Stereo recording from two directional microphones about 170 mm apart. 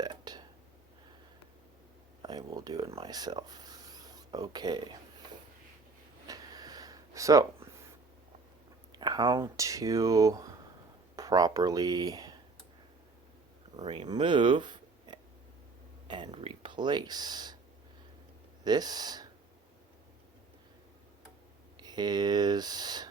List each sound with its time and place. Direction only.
0.0 s whispering: 25° right (ahead or behind)
2.2 s speech: 25° right (ahead or behind)
6.2 s a sound: 20° right (ahead or behind)
9.0 s speech: 25° right (ahead or behind)
13.8 s speech: 30° right (ahead or behind)
18.6 s speech: 25° right (ahead or behind)
21.8 s speech: 25° right (ahead or behind)